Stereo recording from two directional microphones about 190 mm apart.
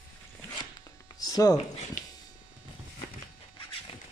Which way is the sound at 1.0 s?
20° left (ahead or behind).